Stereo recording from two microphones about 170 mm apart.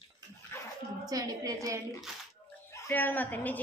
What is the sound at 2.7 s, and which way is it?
Speech, 15° left (ahead or behind).